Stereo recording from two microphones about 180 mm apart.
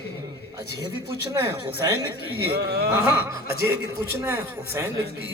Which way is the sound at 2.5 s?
65° right (ahead or behind).